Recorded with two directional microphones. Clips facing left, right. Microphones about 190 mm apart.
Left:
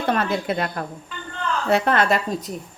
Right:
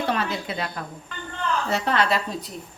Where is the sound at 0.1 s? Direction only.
50° left (ahead or behind).